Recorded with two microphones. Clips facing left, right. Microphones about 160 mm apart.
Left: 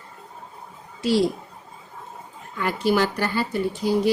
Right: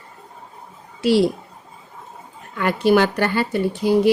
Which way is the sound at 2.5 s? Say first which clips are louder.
Right 5 dB; 65° right (ahead or behind).